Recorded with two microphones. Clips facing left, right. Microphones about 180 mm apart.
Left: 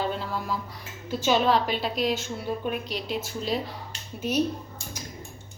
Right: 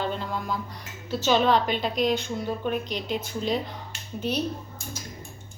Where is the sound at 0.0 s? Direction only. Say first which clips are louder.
Even; 5° left (ahead or behind).